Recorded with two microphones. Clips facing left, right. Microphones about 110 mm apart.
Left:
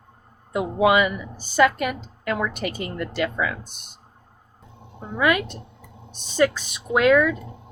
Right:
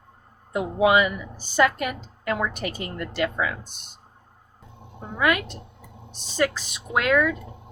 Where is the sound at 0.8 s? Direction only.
65° left (ahead or behind).